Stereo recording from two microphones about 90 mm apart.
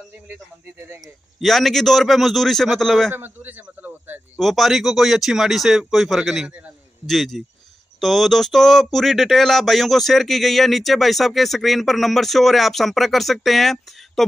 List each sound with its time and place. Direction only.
0.7 s a man's voice: 30° right (ahead or behind)
1.0 s speech: centre (ahead or behind)
3.1 s a man's voice: 25° right (ahead or behind)
3.6 s a sound: 20° right (ahead or behind)
4.4 s speech: centre (ahead or behind)